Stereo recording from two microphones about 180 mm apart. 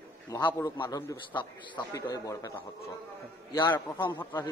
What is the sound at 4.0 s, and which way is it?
Speech, 25° left (ahead or behind).